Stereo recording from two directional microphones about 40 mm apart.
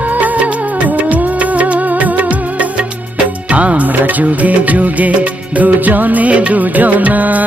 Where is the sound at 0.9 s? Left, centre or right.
Right.